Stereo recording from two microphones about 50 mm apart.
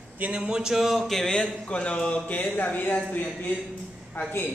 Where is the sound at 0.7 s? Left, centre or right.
Centre.